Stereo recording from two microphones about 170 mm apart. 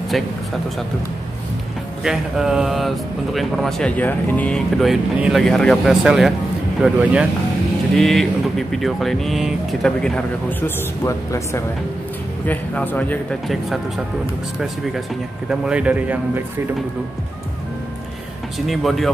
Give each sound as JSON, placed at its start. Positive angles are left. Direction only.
{"t": 0.1, "sound": "speech", "side_deg": 0}
{"t": 2.0, "sound": "speech", "side_deg": -5}
{"t": 11.1, "sound": "a man's voice", "side_deg": 15}
{"t": 18.7, "sound": "speech", "side_deg": 0}